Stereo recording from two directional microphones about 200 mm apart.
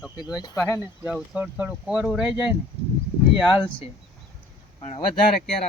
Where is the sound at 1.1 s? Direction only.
5° right (ahead or behind).